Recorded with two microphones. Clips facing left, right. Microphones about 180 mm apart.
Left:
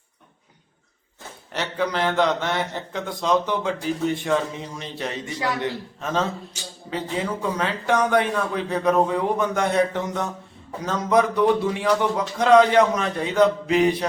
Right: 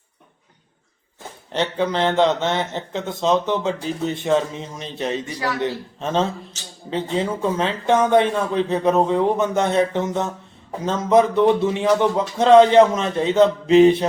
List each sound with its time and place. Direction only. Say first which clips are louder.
1.5 s a man's voice: right 4 dB; 25° right (ahead or behind)
5.3 s a man's voice: right 1 dB; 20° left (ahead or behind)
5.5 s a man's voice: right 3 dB; 25° right (ahead or behind)
6.5 s a man's voice: left 3 dB; 10° left (ahead or behind)
6.9 s a man's voice: right 4 dB; 25° right (ahead or behind)